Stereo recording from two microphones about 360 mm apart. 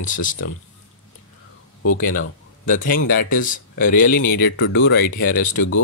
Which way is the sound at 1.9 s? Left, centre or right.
Left.